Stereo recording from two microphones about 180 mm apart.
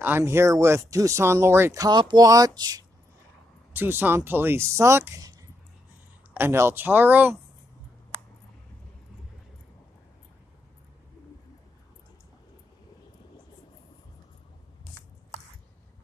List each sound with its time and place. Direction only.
0.0 s speech: 15° right (ahead or behind)
6.3 s speech: 15° right (ahead or behind)